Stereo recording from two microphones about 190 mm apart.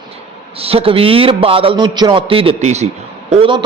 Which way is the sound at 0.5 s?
30° right (ahead or behind).